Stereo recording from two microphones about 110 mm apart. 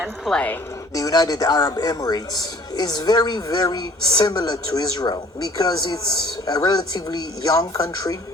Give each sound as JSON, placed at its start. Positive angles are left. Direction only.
{"t": 0.3, "sound": "a woman's voice", "side_deg": 10}
{"t": 0.9, "sound": "a man's voice", "side_deg": 35}